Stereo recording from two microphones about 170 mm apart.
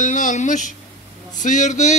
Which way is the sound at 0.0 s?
45° left (ahead or behind).